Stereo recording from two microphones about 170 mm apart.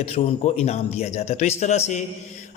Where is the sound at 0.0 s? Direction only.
40° left (ahead or behind).